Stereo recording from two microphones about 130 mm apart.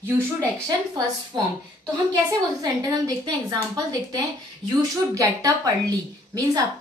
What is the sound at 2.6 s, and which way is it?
A woman's voice, 30° right (ahead or behind).